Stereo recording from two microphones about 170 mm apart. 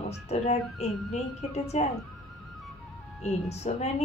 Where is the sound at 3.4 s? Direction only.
40° left (ahead or behind).